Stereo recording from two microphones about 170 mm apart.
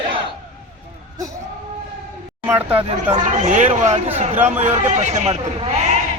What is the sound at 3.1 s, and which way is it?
Speech, 45° right (ahead or behind).